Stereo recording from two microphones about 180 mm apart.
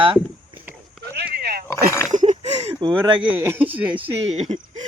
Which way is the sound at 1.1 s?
65° right (ahead or behind).